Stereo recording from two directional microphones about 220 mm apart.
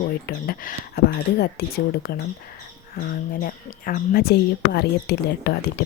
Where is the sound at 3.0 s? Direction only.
40° left (ahead or behind).